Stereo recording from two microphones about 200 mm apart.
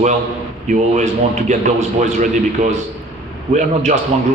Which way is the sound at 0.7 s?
35° right (ahead or behind).